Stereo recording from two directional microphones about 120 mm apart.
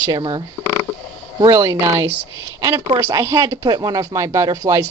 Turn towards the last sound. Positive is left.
turn(degrees=-25)  # may be behind; listen again after turning